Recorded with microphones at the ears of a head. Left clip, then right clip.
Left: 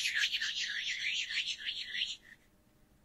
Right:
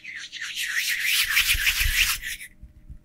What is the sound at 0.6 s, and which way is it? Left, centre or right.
Rub, right.